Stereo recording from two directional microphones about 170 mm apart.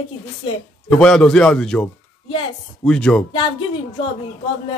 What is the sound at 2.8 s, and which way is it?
Speech, 5° left (ahead or behind).